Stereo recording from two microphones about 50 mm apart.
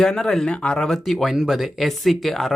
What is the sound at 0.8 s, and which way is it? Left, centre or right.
Speech, centre.